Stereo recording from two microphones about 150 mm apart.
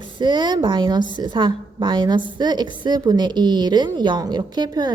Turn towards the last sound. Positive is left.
turn(degrees=-30)  # may be behind; listen again after turning